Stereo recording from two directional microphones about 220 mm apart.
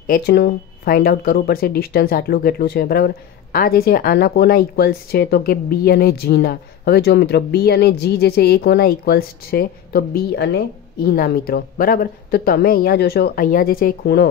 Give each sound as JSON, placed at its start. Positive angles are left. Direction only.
{"t": 0.0, "sound": "a woman's voice", "side_deg": 45}